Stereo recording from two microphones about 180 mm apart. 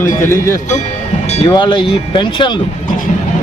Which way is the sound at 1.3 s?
30° left (ahead or behind).